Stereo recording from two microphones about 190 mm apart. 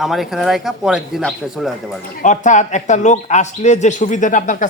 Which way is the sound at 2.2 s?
40° left (ahead or behind).